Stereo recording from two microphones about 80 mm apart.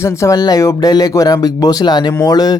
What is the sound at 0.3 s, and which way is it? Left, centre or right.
Speech, left.